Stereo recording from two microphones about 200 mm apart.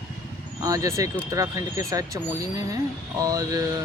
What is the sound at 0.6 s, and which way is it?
Speech, 15° right (ahead or behind).